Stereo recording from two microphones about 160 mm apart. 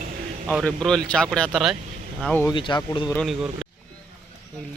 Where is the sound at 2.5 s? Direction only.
30° left (ahead or behind).